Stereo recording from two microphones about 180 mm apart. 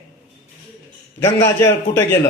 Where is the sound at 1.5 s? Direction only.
15° left (ahead or behind).